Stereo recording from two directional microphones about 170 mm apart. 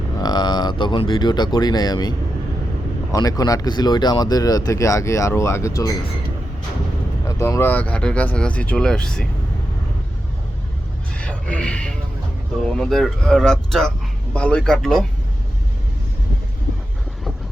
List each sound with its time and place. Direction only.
0.2 s speech: 25° left (ahead or behind)
7.3 s speech: 20° left (ahead or behind)
11.2 s music: 5° left (ahead or behind)
12.6 s speech: 5° left (ahead or behind)